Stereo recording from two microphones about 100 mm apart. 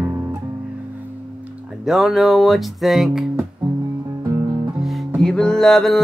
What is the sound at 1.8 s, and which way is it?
Music, 5° right (ahead or behind).